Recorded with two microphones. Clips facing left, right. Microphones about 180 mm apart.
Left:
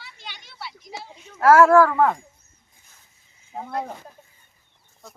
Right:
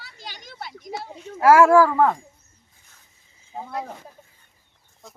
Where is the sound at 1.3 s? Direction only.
10° right (ahead or behind).